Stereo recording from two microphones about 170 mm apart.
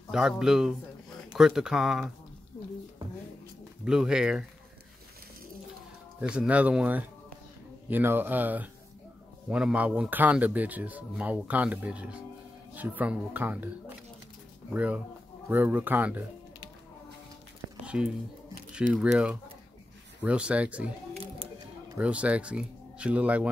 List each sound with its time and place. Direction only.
0.1 s speech: 5° right (ahead or behind)
3.8 s speech: 5° right (ahead or behind)
6.2 s a man's voice: 5° right (ahead or behind)
17.8 s a man's voice: 5° right (ahead or behind)
21.1 s a sound: 35° right (ahead or behind)
21.9 s a man's voice: 5° right (ahead or behind)